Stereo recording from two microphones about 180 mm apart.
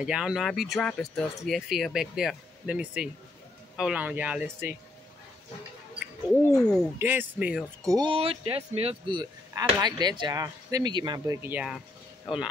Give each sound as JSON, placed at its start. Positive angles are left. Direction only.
{"t": 0.0, "sound": "speech", "side_deg": -5}
{"t": 6.3, "sound": "speech", "side_deg": 15}
{"t": 7.0, "sound": "speech", "side_deg": -10}
{"t": 7.9, "sound": "speech", "side_deg": -25}